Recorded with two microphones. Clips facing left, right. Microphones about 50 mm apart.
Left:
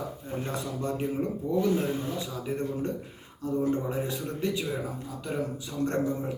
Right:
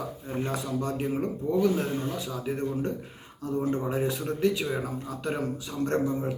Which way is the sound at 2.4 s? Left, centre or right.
Right.